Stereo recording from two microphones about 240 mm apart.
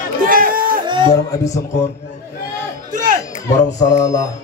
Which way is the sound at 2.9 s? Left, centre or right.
Right.